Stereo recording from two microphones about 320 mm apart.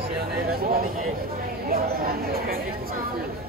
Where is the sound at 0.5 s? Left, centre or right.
Right.